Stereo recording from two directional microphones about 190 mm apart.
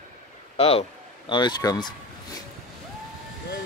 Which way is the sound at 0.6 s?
30° left (ahead or behind).